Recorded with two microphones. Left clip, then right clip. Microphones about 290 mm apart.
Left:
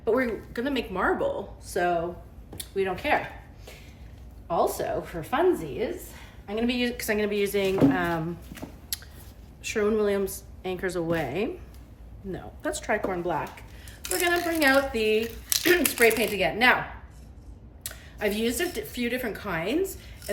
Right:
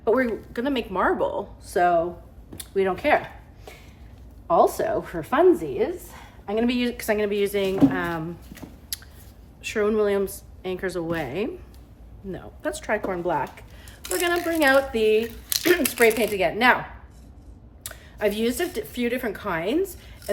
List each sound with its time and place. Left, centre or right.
0.0 s speech: centre
4.4 s a woman's voice: centre
8.9 s a sound: centre
9.6 s a woman's voice: centre
17.8 s speech: centre